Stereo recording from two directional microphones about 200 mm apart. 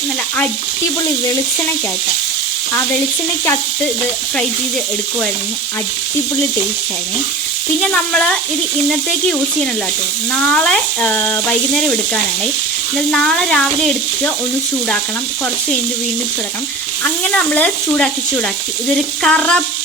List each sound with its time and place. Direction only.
7.8 s speech: 5° left (ahead or behind)
10.5 s speech: 5° left (ahead or behind)
17.0 s stir: 5° left (ahead or behind)
19.2 s speech: 5° left (ahead or behind)